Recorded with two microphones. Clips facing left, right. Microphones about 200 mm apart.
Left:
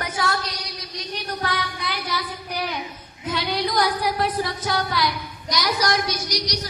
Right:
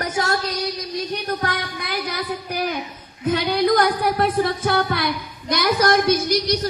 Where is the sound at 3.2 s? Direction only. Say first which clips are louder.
Right 7 dB; 55° right (ahead or behind).